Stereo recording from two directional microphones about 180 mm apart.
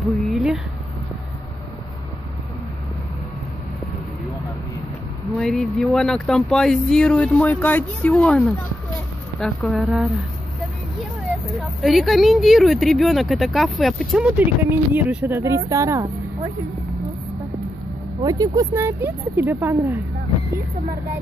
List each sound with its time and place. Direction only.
0.0 s a sound: centre (ahead or behind)
5.4 s speech: centre (ahead or behind)
11.8 s speech: centre (ahead or behind); by 16.1 s 15° right (ahead or behind)
18.2 s speech: 20° right (ahead or behind)